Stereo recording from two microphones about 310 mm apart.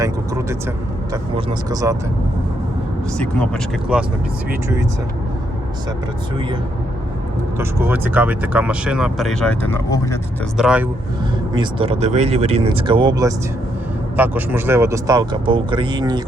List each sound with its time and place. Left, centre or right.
0.0 s vehicle: centre
1.1 s speech: centre
3.2 s speech: centre
7.6 s speech: centre
10.6 s speech: centre
11.5 s speech: centre